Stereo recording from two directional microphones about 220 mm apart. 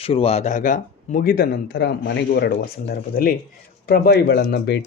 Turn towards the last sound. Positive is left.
turn(degrees=50)  # may be behind; listen again after turning